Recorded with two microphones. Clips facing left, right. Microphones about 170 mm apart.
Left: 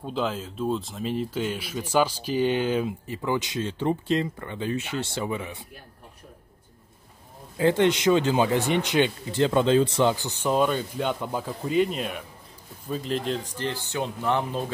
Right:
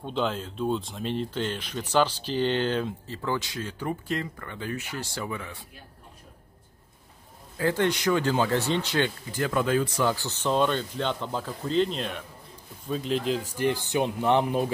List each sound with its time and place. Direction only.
0.0 s speech: centre (ahead or behind); by 5.6 s 20° left (ahead or behind)
7.5 s speech: 20° left (ahead or behind); by 14.7 s 15° right (ahead or behind)